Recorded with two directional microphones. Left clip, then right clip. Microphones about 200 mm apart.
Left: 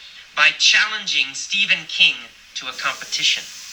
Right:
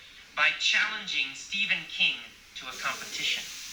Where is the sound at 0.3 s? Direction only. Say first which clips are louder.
Left 10 dB; 50° left (ahead or behind).